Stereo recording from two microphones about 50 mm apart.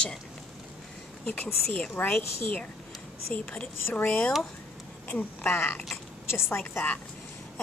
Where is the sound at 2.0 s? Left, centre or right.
Left.